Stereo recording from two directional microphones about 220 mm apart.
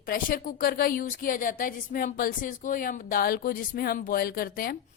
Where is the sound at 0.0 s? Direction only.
40° left (ahead or behind).